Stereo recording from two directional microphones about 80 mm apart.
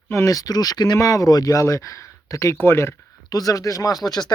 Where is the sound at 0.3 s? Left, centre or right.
Left.